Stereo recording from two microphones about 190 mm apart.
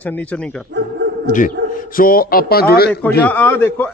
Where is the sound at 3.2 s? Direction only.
10° left (ahead or behind).